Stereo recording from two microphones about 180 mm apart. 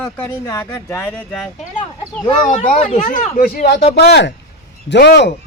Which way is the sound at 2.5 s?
45° left (ahead or behind).